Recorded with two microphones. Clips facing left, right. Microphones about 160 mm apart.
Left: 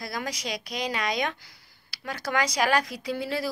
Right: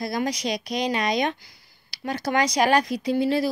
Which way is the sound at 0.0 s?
25° right (ahead or behind).